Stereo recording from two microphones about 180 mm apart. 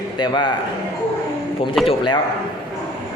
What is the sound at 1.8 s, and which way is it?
Speech, 25° left (ahead or behind).